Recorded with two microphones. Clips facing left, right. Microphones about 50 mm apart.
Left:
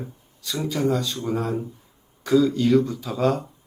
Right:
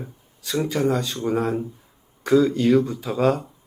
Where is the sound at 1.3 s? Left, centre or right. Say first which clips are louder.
Right 4 dB; centre.